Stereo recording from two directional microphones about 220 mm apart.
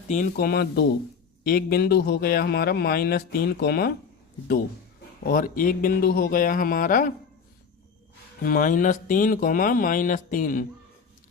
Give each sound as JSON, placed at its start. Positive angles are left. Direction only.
{"t": 0.1, "sound": "a man's voice", "side_deg": 40}
{"t": 5.2, "sound": "speech", "side_deg": 40}
{"t": 8.4, "sound": "speech", "side_deg": 40}